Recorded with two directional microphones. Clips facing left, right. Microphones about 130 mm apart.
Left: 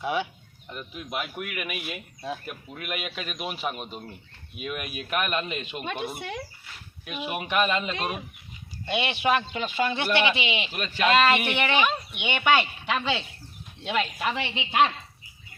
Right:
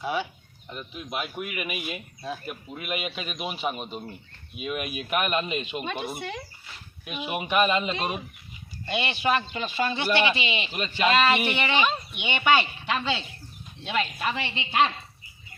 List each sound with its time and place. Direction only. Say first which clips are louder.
0.0 s speech: left 1 dB; 15° left (ahead or behind)
0.7 s speech: even; centre (ahead or behind)
6.1 s speech: even; 10° left (ahead or behind)
7.0 s speech: right 1 dB; 5° right (ahead or behind)
8.9 s speech: left 1 dB; 15° left (ahead or behind)
9.9 s speech: right 2 dB; 5° right (ahead or behind)
11.5 s speech: left 1 dB; 10° left (ahead or behind)